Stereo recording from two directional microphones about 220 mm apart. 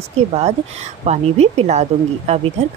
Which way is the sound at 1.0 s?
30° right (ahead or behind).